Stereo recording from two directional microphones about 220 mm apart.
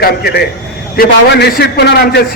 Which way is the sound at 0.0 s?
45° left (ahead or behind).